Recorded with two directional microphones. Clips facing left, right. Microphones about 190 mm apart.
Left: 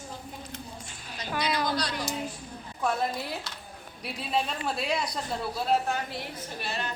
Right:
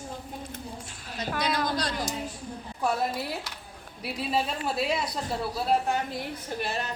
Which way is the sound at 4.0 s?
5° right (ahead or behind).